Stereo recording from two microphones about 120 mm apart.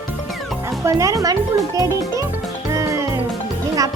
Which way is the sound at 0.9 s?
30° right (ahead or behind).